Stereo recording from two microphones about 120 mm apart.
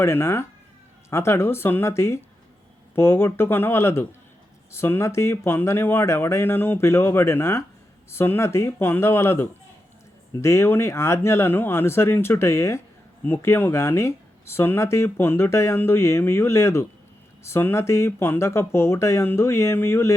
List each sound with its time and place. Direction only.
0.0 s speech: 20° left (ahead or behind)